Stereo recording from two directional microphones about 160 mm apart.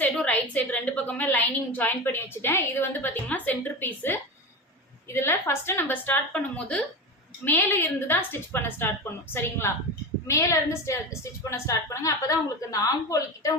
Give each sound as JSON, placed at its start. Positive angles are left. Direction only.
{"t": 0.0, "sound": "a woman's voice", "side_deg": 10}